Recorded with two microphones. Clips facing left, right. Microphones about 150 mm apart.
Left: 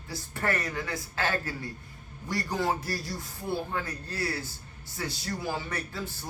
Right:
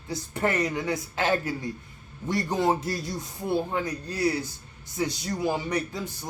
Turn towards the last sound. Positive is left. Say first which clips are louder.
# right 6 dB
turn(degrees=-15)  # may be behind; listen again after turning